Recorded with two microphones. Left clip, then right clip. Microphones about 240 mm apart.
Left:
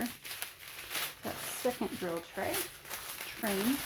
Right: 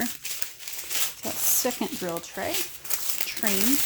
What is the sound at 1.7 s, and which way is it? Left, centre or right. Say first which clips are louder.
Speech: right 6 dB; right.